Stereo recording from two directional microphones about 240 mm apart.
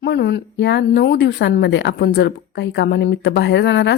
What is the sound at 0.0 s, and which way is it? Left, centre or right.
A woman's voice, left.